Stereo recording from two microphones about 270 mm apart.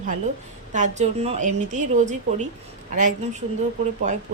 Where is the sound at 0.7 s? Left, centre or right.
Right.